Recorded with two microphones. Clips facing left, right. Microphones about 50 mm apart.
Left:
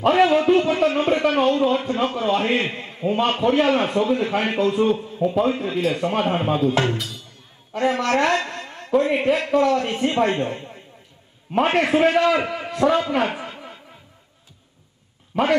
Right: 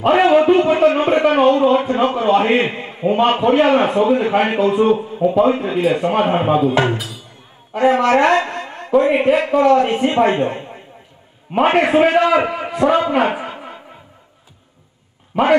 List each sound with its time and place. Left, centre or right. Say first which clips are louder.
0.1 s a man's voice: right 5 dB; right
15.3 s speech: right 5 dB; centre